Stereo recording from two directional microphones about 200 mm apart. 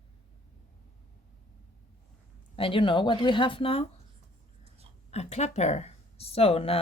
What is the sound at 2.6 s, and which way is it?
Speech, 25° left (ahead or behind).